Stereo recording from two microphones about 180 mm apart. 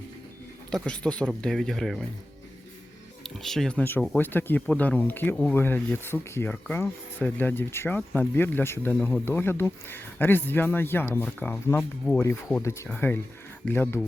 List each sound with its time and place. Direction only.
0.7 s speech: 5° left (ahead or behind)
3.2 s speech: centre (ahead or behind)